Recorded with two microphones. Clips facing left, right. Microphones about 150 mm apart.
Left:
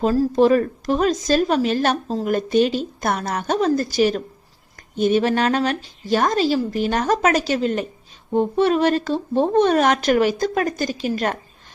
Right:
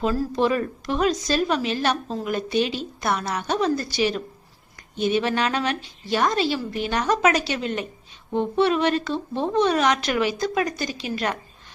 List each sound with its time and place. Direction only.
0.0 s speech: 40° left (ahead or behind)